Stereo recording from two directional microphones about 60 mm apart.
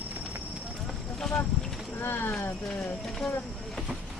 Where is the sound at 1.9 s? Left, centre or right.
Left.